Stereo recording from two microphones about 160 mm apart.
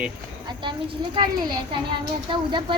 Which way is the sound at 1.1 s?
25° right (ahead or behind).